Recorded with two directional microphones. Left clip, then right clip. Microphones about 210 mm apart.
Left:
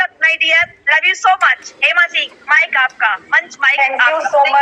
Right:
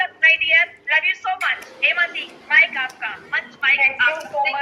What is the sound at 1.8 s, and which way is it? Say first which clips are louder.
A man's voice: left 7 dB; 40° left (ahead or behind).